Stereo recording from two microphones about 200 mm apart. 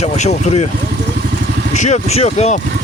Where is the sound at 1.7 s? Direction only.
35° left (ahead or behind).